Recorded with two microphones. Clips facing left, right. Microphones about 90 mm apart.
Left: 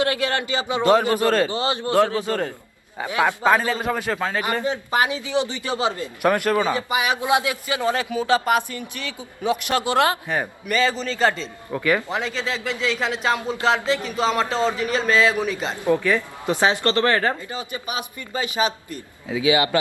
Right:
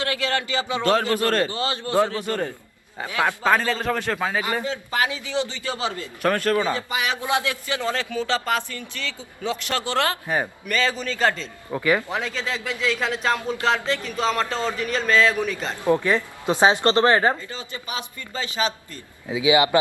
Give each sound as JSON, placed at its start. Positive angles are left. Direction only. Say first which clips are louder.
{"t": 0.0, "sound": "a man's voice", "louder": "left 3 dB", "side_deg": 20}
{"t": 4.6, "sound": "a man's voice", "louder": "left 3 dB", "side_deg": 20}
{"t": 10.2, "sound": "a man's voice", "louder": "even", "side_deg": -10}
{"t": 10.7, "sound": "a man's voice", "louder": "left 4 dB", "side_deg": 5}
{"t": 15.8, "sound": "a woman's voice", "louder": "even", "side_deg": -20}
{"t": 17.5, "sound": "a man's voice", "louder": "left 3 dB", "side_deg": 15}
{"t": 19.3, "sound": "a woman's voice", "louder": "right 1 dB", "side_deg": -20}